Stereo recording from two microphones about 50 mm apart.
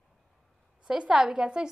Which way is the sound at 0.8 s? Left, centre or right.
Centre.